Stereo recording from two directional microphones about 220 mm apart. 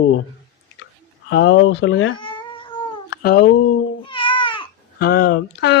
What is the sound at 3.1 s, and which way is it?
Speech, 45° left (ahead or behind).